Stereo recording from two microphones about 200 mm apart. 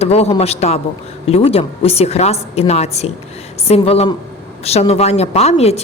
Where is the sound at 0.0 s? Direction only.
30° left (ahead or behind).